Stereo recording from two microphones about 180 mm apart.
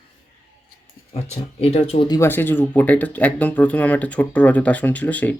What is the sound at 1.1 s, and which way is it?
Speech, 35° left (ahead or behind).